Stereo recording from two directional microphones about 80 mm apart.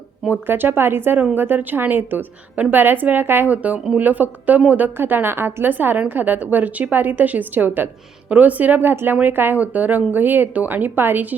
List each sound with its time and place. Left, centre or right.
0.3 s a woman's voice: right